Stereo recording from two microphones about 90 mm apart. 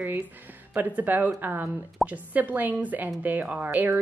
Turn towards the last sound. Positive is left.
turn(degrees=-20)  # may be behind; listen again after turning